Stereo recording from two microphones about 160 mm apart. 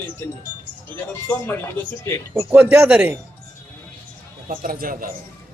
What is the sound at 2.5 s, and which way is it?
Speech, 10° right (ahead or behind).